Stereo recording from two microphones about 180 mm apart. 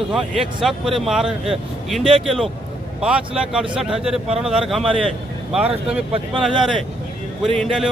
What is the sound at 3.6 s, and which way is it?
Speech, 30° right (ahead or behind).